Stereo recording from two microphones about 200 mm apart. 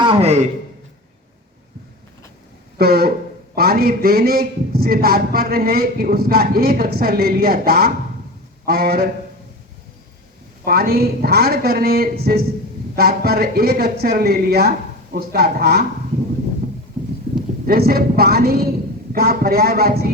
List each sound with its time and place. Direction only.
0.0 s a man's voice: 30° right (ahead or behind)
2.7 s a man's voice: 50° right (ahead or behind)
10.7 s a man's voice: 50° right (ahead or behind)
17.7 s a man's voice: 50° right (ahead or behind)